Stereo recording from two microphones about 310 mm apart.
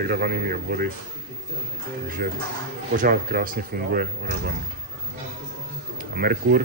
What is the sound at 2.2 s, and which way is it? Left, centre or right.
Speech, right.